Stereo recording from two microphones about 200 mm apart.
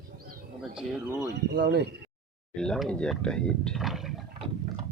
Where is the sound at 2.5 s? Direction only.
5° left (ahead or behind).